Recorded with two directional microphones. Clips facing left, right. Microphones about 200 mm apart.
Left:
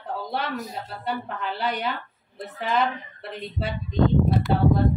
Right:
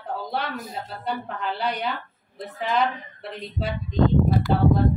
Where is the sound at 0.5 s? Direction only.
55° right (ahead or behind).